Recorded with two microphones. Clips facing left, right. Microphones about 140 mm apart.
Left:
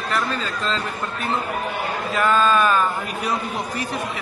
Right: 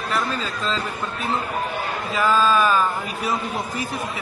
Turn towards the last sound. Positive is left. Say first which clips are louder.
# even
turn(degrees=0)  # may be behind; listen again after turning